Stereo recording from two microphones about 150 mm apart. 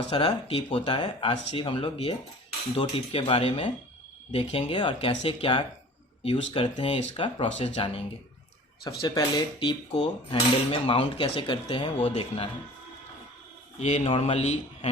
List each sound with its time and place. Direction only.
0.1 s speech: 35° left (ahead or behind)
8.8 s speech: 25° left (ahead or behind)
13.7 s a man's voice: 50° left (ahead or behind)